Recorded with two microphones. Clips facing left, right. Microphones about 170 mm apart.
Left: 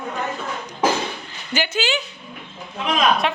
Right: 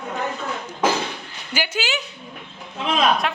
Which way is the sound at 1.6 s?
10° right (ahead or behind).